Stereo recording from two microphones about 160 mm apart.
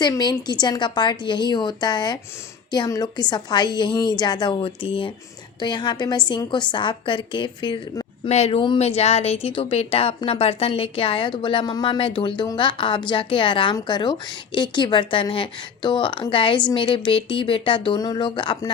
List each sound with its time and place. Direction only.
0.0 s a woman's voice: 25° left (ahead or behind)
8.3 s a woman's voice: 40° left (ahead or behind)